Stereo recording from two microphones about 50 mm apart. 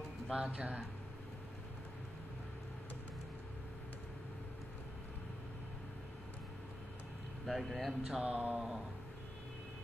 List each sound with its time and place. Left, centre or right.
0.3 s speech: right
7.4 s speech: centre
8.2 s speech: right